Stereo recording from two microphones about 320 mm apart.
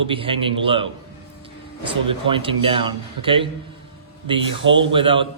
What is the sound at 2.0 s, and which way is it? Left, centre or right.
Speech, centre.